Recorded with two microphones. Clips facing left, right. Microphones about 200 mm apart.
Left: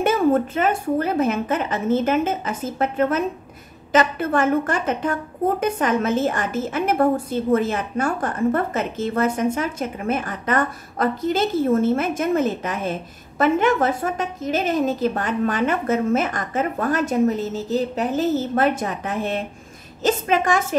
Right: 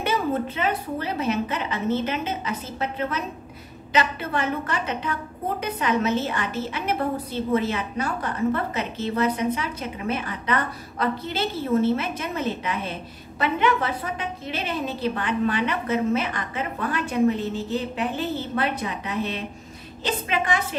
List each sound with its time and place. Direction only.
0.0 s a woman's voice: 50° left (ahead or behind)